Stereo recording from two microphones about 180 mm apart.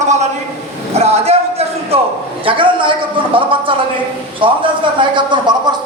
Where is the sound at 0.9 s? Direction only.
35° right (ahead or behind).